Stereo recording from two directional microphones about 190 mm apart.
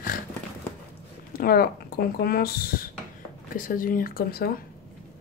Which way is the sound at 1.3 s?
50° left (ahead or behind).